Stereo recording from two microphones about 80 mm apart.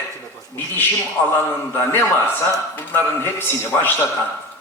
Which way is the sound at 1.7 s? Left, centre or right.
Left.